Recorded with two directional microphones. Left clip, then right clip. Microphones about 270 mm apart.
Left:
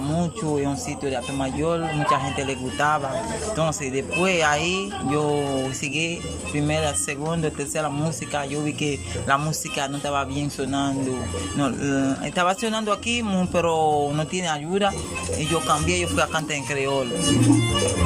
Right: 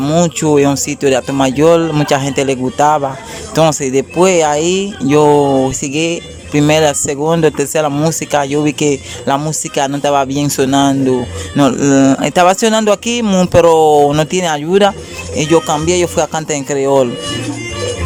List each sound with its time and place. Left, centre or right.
0.0 s speech: right